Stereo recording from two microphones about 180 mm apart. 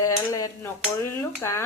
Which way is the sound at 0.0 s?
20° left (ahead or behind).